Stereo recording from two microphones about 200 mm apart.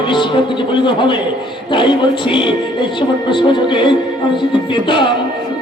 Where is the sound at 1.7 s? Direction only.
25° left (ahead or behind).